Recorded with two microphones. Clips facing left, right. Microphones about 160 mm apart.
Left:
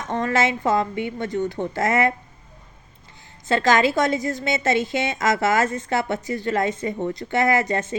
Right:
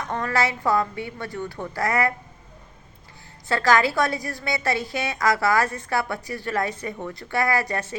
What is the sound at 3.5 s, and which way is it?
A woman's voice, 20° left (ahead or behind).